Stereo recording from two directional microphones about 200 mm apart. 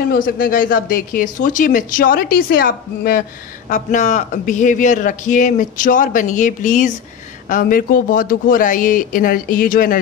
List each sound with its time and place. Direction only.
0.1 s speech: 45° left (ahead or behind)